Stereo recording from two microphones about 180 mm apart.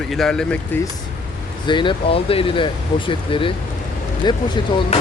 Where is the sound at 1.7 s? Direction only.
25° left (ahead or behind).